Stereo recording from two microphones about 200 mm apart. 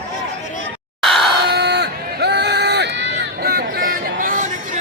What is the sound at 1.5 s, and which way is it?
Run, 60° right (ahead or behind).